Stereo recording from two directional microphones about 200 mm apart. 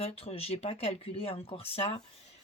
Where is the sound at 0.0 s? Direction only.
30° left (ahead or behind).